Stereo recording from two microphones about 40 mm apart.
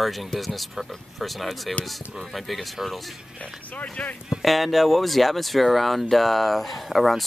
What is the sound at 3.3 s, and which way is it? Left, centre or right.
Speech, left.